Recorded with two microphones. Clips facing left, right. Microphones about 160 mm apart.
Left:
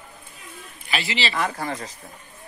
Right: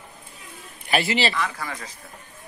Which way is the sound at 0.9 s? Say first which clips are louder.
Right 5 dB; 50° right (ahead or behind).